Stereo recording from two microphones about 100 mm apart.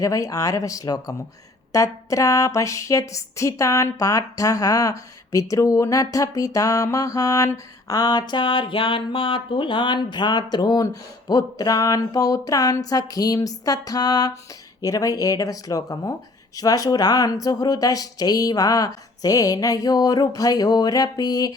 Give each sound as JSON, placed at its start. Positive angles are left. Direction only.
{"t": 0.0, "sound": "speech", "side_deg": 35}